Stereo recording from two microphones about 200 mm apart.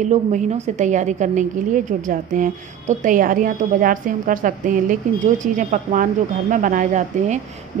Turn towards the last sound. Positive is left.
turn(degrees=-40)  # may be behind; listen again after turning